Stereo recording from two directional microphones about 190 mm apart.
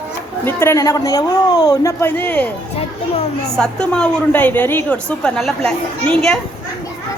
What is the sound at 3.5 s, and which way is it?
A woman's voice, 5° left (ahead or behind).